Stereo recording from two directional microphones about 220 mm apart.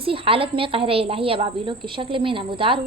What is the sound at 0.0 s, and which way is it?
A woman's voice, 25° right (ahead or behind).